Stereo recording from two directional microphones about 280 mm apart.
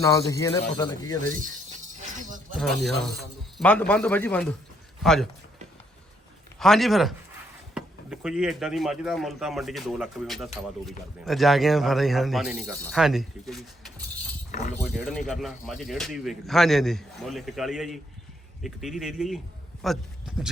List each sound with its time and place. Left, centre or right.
0.0 s speech: centre
2.1 s a sound: right
2.6 s speech: centre
6.6 s speech: centre